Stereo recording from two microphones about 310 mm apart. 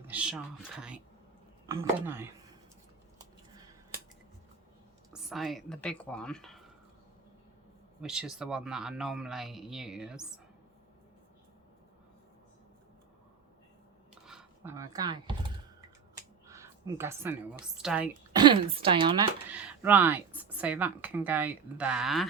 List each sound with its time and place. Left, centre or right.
0.1 s a woman's voice: centre
5.1 s speech: centre
8.0 s speech: centre
14.3 s a sound: centre
16.1 s finger snapping: centre
17.7 s speech: centre
18.4 s a woman's voice: centre
19.5 s speech: centre